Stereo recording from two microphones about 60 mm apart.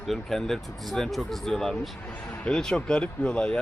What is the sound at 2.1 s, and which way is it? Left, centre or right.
Speech, left.